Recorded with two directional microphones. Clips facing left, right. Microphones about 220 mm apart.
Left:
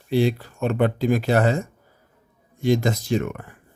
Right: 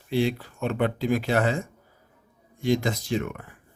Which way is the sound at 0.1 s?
40° left (ahead or behind).